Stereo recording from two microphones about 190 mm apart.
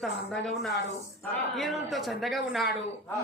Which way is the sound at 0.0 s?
Centre (ahead or behind).